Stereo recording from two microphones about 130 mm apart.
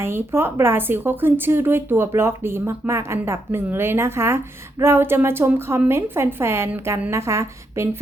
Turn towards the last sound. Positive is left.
turn(degrees=-20)  # may be behind; listen again after turning